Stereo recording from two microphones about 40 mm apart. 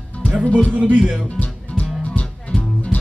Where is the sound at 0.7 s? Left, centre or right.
Right.